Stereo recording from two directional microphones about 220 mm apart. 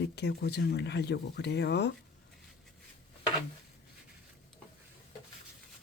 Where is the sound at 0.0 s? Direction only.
50° left (ahead or behind).